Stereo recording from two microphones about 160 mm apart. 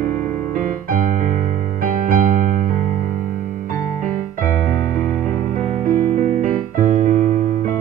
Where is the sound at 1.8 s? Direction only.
60° right (ahead or behind).